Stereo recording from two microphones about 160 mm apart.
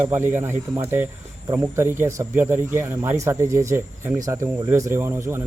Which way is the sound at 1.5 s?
15° right (ahead or behind).